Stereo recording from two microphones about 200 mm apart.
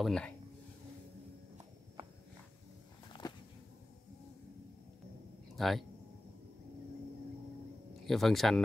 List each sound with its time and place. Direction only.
0.0 s speech: 5° left (ahead or behind)
3.1 s a sound: 20° left (ahead or behind)
5.6 s speech: centre (ahead or behind)
8.1 s speech: centre (ahead or behind)